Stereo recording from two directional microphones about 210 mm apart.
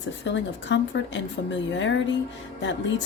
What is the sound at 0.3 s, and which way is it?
Speech, 60° left (ahead or behind).